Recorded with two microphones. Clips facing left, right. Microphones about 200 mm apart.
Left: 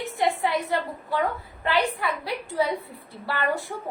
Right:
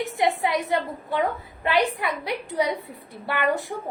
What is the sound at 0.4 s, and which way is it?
A woman's voice, 20° right (ahead or behind).